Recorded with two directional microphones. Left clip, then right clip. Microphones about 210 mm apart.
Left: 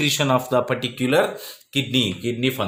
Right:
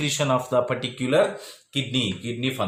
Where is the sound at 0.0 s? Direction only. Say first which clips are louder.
Left 3 dB; 40° left (ahead or behind).